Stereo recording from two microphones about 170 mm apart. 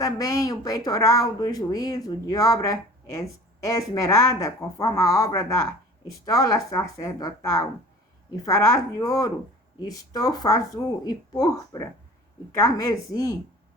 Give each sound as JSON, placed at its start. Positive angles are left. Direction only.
{"t": 0.0, "sound": "speech", "side_deg": 20}